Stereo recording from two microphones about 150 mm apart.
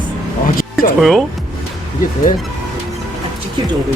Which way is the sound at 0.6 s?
75° left (ahead or behind).